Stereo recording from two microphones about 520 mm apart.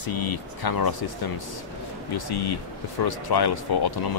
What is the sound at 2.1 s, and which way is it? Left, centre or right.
Speech, left.